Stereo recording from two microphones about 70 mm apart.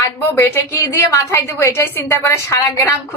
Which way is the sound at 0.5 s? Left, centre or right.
Left.